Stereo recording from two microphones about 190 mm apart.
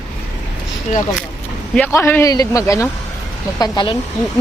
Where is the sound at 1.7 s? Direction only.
10° left (ahead or behind).